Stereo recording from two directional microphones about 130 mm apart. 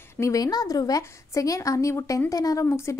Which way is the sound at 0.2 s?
25° left (ahead or behind).